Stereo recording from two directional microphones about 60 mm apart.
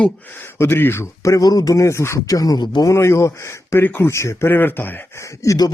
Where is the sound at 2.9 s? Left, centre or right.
Left.